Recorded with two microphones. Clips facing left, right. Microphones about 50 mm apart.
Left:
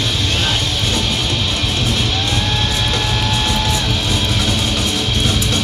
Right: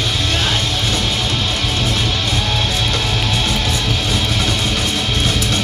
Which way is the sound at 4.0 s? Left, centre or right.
Right.